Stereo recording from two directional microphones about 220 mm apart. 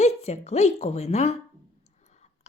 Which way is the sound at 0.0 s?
30° left (ahead or behind).